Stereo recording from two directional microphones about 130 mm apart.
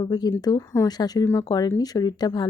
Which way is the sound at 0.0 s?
30° left (ahead or behind).